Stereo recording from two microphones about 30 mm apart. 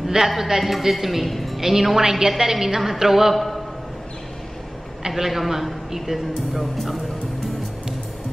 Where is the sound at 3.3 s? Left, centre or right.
Centre.